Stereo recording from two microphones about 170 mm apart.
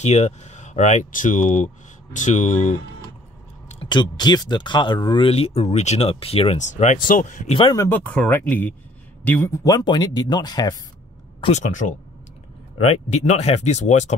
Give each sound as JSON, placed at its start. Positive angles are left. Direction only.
{"t": 0.0, "sound": "speech", "side_deg": 40}
{"t": 3.9, "sound": "speech", "side_deg": 25}
{"t": 7.7, "sound": "speech", "side_deg": 15}
{"t": 11.4, "sound": "speech", "side_deg": 45}